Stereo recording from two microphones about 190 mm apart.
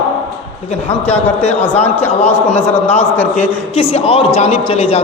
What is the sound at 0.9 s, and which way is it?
Speech, 35° left (ahead or behind).